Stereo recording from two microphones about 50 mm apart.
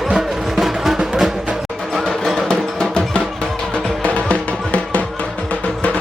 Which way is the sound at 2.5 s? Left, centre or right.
Centre.